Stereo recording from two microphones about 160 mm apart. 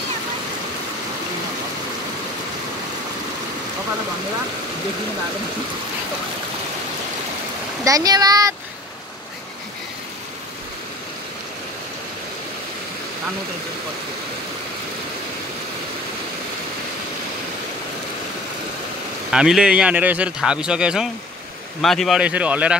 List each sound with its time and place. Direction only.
7.8 s speech: 20° right (ahead or behind)
19.3 s speech: 5° right (ahead or behind)